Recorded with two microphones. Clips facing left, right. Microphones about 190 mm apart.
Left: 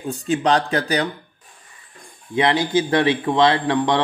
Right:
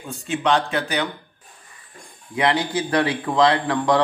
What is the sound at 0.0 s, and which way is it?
Speech, 35° left (ahead or behind).